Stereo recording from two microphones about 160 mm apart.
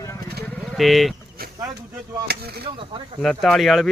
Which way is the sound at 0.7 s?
Centre (ahead or behind).